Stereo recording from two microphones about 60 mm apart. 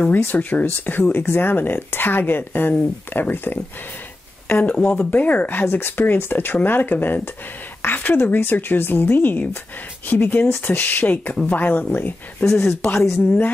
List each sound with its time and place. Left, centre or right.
0.0 s speech: left
4.6 s speech: centre
4.9 s speech: left